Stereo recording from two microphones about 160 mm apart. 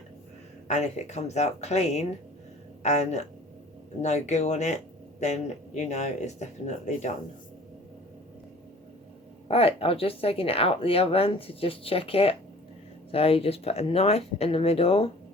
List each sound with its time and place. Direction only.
0.7 s speech: 45° left (ahead or behind)
9.5 s speech: 40° left (ahead or behind)